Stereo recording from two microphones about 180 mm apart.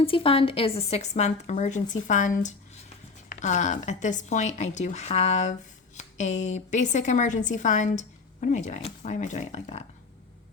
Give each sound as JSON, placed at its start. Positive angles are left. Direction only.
{"t": 0.0, "sound": "a woman's voice", "side_deg": 30}